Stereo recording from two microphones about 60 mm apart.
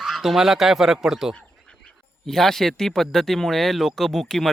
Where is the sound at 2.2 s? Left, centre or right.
Centre.